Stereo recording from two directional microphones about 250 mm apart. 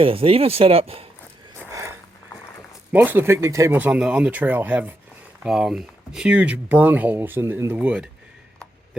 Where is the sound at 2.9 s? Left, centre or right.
Centre.